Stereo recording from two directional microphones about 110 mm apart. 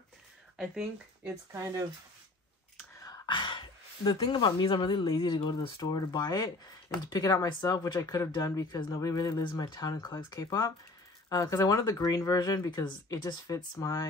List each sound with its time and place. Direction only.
0.6 s speech: 5° right (ahead or behind)
1.5 s speech: 25° right (ahead or behind)
3.3 s speech: 45° left (ahead or behind)